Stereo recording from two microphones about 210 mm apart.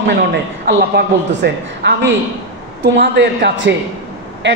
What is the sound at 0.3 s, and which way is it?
A man's voice, 55° right (ahead or behind).